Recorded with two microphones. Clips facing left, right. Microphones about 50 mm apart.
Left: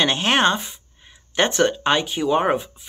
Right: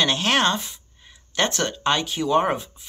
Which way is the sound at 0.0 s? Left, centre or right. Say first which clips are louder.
Left 2 dB; left.